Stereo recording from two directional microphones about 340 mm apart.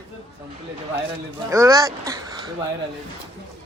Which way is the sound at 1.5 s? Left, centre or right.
Centre.